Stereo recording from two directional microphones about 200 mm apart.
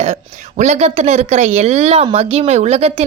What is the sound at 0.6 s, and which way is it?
Speech, 35° right (ahead or behind).